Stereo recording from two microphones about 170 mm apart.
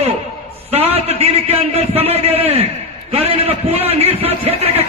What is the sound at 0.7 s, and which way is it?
A man's voice, 35° right (ahead or behind).